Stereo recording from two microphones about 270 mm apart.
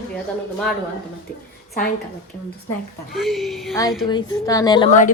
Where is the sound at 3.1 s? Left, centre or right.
Centre.